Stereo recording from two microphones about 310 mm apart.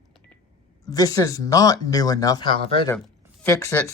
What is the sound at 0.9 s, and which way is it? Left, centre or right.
Speech, centre.